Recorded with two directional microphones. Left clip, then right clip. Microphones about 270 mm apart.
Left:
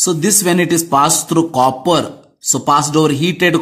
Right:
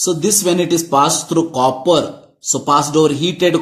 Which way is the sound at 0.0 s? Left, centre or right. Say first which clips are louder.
Left 1 dB; left.